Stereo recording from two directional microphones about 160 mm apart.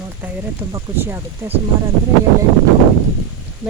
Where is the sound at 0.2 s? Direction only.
10° right (ahead or behind).